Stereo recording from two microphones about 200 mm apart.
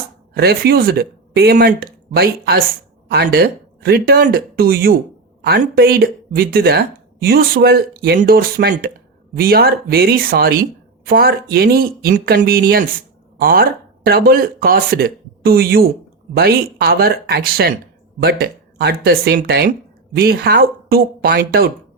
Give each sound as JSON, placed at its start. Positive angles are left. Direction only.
{"t": 0.3, "sound": "speech", "side_deg": -50}